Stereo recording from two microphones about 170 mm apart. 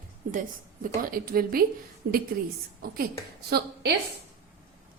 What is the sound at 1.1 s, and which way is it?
Speech, 60° right (ahead or behind).